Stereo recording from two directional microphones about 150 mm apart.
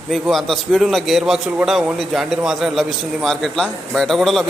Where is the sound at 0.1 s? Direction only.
Centre (ahead or behind).